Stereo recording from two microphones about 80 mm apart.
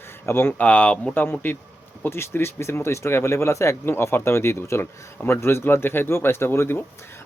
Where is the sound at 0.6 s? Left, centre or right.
Centre.